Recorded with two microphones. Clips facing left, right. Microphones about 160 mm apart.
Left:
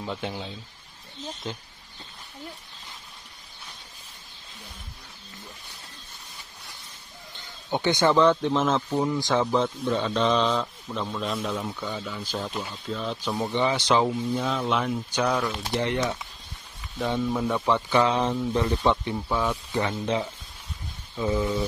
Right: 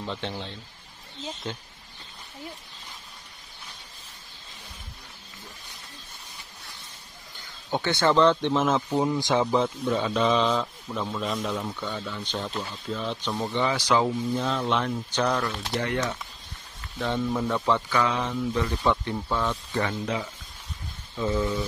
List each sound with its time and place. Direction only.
0.0 s speech: 10° left (ahead or behind)
7.7 s speech: 15° left (ahead or behind)
8.5 s speech: 10° right (ahead or behind)
9.0 s a man's voice: 20° right (ahead or behind); by 14.0 s 20° left (ahead or behind)
14.0 s a man's voice: centre (ahead or behind); by 16.2 s 20° left (ahead or behind)
17.2 s a man's voice: centre (ahead or behind)
17.5 s speech: 10° left (ahead or behind); by 18.8 s 35° left (ahead or behind)
19.1 s speech: 5° left (ahead or behind)
21.2 s speech: 15° left (ahead or behind)